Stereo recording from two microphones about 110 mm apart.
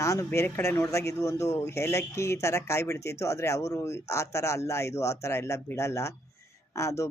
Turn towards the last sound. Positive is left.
turn(degrees=25)  # may be behind; listen again after turning